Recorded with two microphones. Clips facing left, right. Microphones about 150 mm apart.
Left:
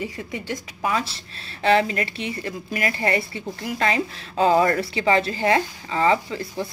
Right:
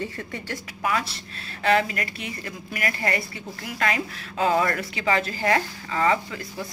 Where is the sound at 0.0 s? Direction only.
15° left (ahead or behind).